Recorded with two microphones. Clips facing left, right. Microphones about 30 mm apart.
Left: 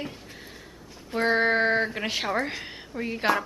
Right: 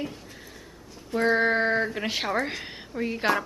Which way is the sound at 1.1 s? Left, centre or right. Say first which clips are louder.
Even; centre.